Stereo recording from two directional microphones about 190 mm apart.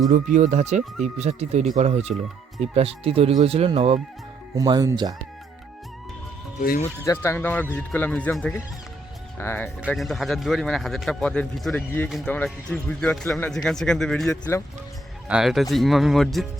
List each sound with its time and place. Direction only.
0.1 s speech: 40° right (ahead or behind)
4.5 s speech: 20° right (ahead or behind)
6.6 s speech: 50° left (ahead or behind)
7.0 s speech: 15° left (ahead or behind)
9.4 s speech: 15° left (ahead or behind)
9.8 s a man's voice: centre (ahead or behind)